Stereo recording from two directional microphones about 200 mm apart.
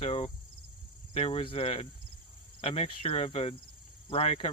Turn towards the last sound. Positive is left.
turn(degrees=30)  # may be behind; listen again after turning